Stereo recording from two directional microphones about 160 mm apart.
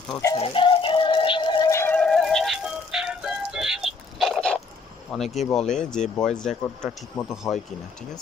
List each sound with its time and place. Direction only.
0.4 s music: 30° left (ahead or behind)
1.7 s music: 15° left (ahead or behind)
2.0 s music: 5° left (ahead or behind)
5.1 s speech: centre (ahead or behind)